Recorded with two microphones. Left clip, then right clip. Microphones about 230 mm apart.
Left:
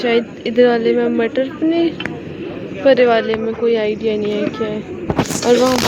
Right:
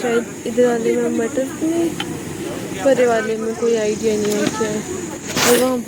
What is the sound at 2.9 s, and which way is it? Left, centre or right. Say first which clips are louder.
Speech: left 3 dB; centre.